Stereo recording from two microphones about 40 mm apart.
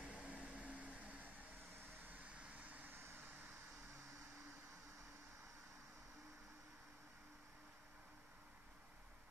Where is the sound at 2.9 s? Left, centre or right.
Right.